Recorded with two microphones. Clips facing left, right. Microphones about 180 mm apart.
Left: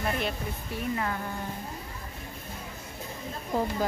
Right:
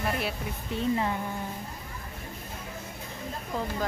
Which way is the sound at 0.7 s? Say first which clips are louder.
Right 4 dB; 20° right (ahead or behind).